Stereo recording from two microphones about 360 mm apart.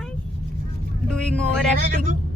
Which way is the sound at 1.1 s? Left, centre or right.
Centre.